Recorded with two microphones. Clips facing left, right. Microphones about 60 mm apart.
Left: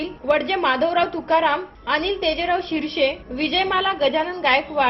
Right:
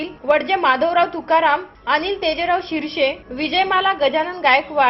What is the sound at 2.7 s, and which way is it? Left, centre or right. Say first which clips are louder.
Speech: right 1 dB; right.